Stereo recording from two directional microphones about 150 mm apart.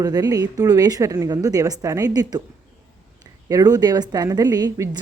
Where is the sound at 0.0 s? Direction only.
25° right (ahead or behind).